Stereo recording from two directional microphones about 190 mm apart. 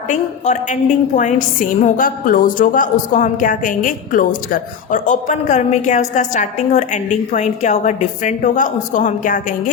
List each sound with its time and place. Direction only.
0.1 s a woman's voice: 40° left (ahead or behind)